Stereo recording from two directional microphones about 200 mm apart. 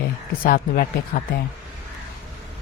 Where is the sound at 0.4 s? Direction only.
45° left (ahead or behind).